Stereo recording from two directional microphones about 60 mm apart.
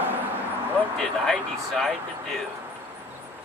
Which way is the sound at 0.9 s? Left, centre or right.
Centre.